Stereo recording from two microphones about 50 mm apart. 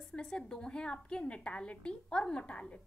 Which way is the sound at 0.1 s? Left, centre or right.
Centre.